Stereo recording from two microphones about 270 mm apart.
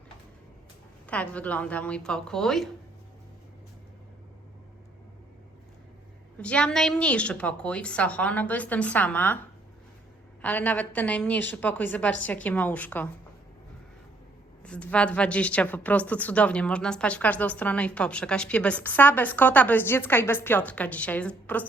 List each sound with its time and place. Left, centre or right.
1.0 s a woman's voice: centre
6.4 s a woman's voice: centre
10.4 s a woman's voice: centre
14.6 s a woman's voice: centre